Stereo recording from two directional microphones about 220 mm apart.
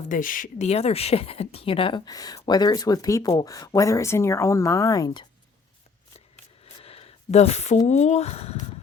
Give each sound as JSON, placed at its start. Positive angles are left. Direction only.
{"t": 0.1, "sound": "speech", "side_deg": 40}
{"t": 6.8, "sound": "a sound", "side_deg": 25}
{"t": 7.9, "sound": "speech", "side_deg": 30}